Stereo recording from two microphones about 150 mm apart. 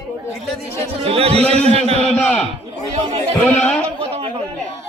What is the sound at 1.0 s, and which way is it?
Speech, 40° right (ahead or behind).